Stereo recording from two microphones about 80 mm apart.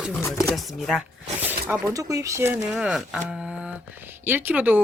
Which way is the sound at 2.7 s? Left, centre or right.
Centre.